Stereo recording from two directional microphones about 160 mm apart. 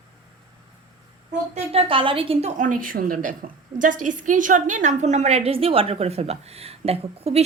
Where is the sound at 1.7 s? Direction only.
35° right (ahead or behind).